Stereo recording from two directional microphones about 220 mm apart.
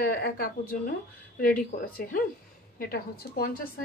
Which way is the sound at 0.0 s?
45° left (ahead or behind).